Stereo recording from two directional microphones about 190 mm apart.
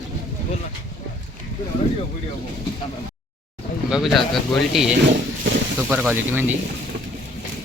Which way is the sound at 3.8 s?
Centre (ahead or behind).